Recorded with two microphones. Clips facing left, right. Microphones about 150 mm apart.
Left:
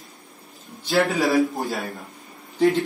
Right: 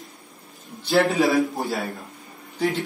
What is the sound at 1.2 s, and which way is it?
Speech, centre (ahead or behind).